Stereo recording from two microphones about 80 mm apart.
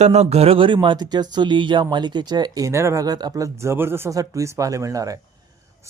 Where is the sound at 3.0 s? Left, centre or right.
Right.